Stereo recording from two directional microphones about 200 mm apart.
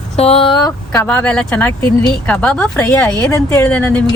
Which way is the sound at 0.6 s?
10° left (ahead or behind).